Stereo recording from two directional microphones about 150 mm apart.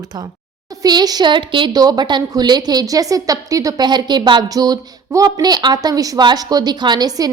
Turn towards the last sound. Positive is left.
turn(degrees=-25)  # may be behind; listen again after turning